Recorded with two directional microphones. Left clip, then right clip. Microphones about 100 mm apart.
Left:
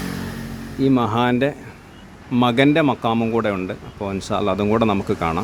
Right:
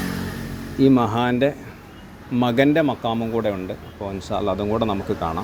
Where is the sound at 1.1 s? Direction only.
30° left (ahead or behind).